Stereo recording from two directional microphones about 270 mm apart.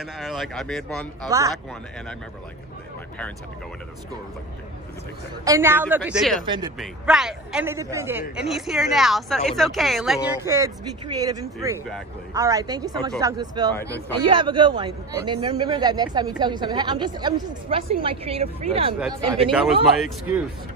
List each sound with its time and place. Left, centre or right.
0.0 s a man's voice: centre
5.4 s a man's voice: centre
19.5 s a man's voice: centre